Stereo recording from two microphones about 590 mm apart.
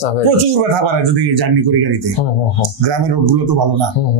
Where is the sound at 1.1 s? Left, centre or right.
Right.